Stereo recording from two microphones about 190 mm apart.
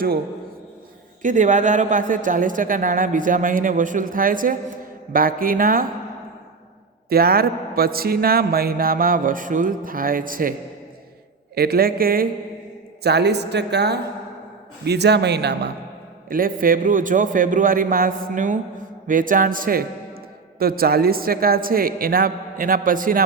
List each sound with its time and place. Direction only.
1.2 s a man's voice: 40° right (ahead or behind)
7.1 s a man's voice: 55° right (ahead or behind)
11.5 s a man's voice: 55° right (ahead or behind)
16.3 s a man's voice: 50° right (ahead or behind)